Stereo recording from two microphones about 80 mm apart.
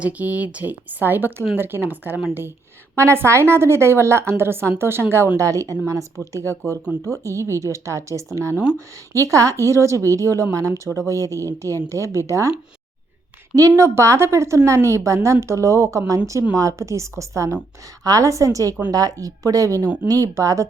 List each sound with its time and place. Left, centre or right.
0.0 s speech: centre
2.9 s a woman's voice: right
5.4 s a woman's voice: right
9.2 s a woman's voice: right
13.6 s a woman's voice: right